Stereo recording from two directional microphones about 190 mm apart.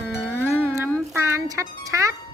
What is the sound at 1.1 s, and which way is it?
Music, 15° right (ahead or behind).